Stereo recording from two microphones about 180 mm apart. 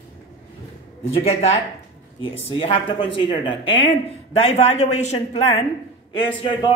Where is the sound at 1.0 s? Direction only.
35° left (ahead or behind).